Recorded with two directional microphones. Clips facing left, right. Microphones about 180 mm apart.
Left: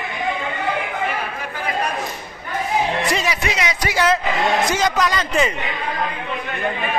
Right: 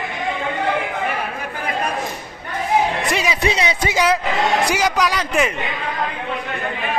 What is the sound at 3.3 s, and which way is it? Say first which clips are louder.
Speech: right 3 dB; 30° right (ahead or behind).